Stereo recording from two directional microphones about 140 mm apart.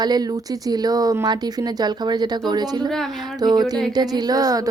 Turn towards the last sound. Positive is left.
turn(degrees=-25)  # may be behind; listen again after turning